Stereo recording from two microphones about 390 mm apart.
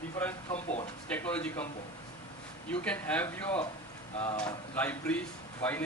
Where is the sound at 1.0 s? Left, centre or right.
Centre.